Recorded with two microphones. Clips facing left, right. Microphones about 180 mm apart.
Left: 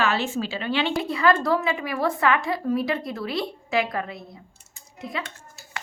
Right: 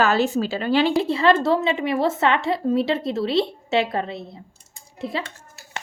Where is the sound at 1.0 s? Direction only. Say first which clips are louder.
Right 4 dB; 25° right (ahead or behind).